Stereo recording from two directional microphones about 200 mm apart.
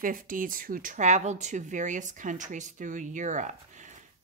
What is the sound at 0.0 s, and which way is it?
Speech, 45° right (ahead or behind).